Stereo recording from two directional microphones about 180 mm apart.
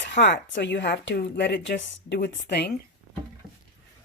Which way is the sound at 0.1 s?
75° left (ahead or behind).